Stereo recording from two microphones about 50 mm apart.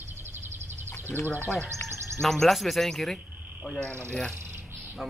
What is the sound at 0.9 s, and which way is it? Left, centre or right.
Bird, left.